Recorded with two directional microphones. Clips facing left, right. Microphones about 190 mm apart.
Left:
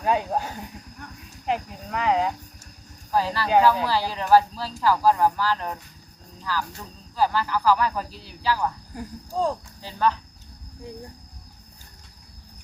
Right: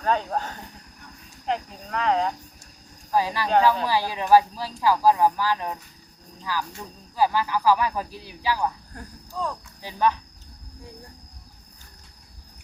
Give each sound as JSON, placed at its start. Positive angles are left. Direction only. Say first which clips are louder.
{"t": 0.0, "sound": "speech", "louder": "left 1 dB", "side_deg": 10}
{"t": 3.1, "sound": "speech", "louder": "even", "side_deg": -15}
{"t": 9.3, "sound": "speech", "louder": "left 5 dB", "side_deg": 30}
{"t": 9.8, "sound": "speech", "louder": "even", "side_deg": -15}